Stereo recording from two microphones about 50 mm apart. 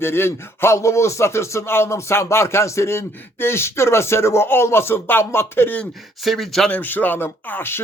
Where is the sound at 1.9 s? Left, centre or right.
Left.